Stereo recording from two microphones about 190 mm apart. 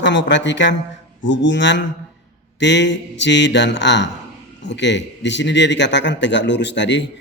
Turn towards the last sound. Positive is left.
turn(degrees=70)  # may be behind; listen again after turning